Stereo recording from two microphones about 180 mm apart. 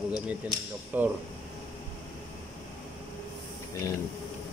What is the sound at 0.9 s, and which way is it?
Speech, 10° right (ahead or behind).